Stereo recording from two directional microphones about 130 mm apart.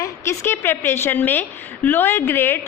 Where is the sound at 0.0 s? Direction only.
20° left (ahead or behind).